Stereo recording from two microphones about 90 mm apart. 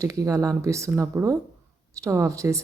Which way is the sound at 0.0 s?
40° right (ahead or behind).